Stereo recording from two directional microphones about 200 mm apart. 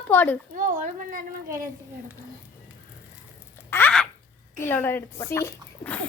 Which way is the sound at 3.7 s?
5° left (ahead or behind).